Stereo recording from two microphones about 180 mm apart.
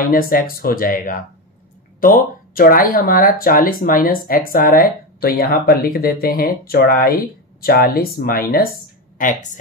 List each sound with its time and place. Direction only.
0.0 s speech: 55° left (ahead or behind)